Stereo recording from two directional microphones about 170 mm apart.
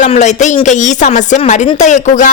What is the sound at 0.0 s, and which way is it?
A woman's voice, 45° left (ahead or behind).